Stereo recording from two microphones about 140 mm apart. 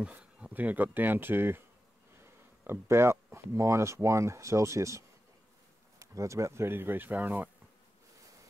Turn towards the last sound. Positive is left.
turn(degrees=-15)  # may be behind; listen again after turning